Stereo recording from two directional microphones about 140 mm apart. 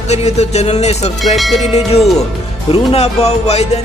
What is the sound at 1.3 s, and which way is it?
Music, centre (ahead or behind).